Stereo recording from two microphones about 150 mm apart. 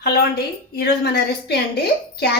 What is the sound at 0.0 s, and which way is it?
A woman's voice, 90° left.